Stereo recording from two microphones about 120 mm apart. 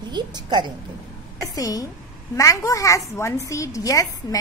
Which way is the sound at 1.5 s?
30° left (ahead or behind).